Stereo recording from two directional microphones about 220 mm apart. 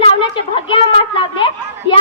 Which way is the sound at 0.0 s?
25° left (ahead or behind).